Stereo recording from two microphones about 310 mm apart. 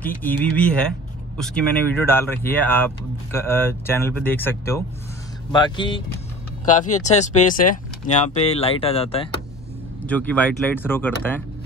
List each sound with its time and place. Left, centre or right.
0.2 s speech: centre
10.0 s speech: centre